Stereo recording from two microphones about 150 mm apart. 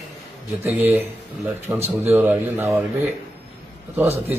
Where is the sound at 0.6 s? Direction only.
10° right (ahead or behind).